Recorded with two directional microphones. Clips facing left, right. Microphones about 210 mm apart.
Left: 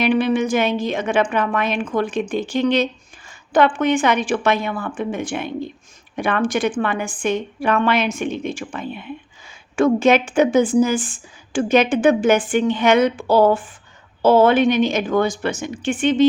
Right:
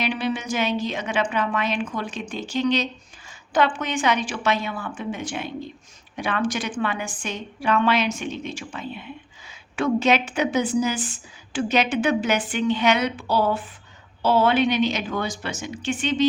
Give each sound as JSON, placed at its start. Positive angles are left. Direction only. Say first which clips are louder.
{"t": 0.0, "sound": "a woman's voice", "louder": "left 8 dB", "side_deg": 55}